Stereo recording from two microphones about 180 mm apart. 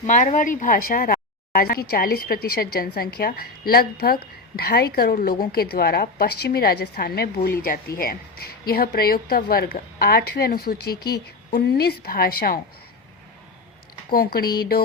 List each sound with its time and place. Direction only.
0.0 s speech: 45° left (ahead or behind)
14.1 s speech: 55° left (ahead or behind)